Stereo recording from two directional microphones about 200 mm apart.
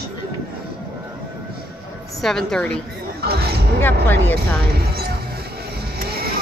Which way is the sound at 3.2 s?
50° right (ahead or behind).